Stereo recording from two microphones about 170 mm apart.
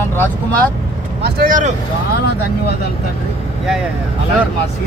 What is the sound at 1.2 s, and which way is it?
Speech, 55° right (ahead or behind).